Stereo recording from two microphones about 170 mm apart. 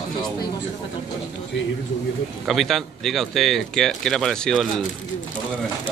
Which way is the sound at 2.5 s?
Centre (ahead or behind).